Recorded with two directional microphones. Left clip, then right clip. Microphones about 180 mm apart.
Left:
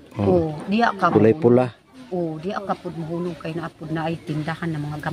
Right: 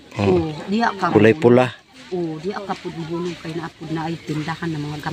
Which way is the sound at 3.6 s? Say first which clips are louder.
Left 1 dB; 25° left (ahead or behind).